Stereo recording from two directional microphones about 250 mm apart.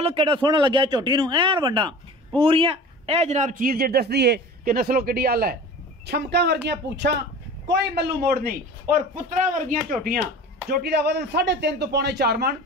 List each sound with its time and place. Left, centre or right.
0.0 s a man's voice: right